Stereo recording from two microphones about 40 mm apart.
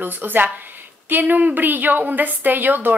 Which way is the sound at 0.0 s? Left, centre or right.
Right.